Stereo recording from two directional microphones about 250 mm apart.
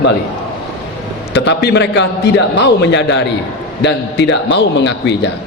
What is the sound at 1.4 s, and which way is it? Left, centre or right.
A man's voice, left.